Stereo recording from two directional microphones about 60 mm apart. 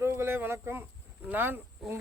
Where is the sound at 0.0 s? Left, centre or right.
Right.